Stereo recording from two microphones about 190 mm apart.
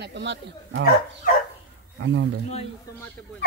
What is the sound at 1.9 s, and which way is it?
Speech, 90° right.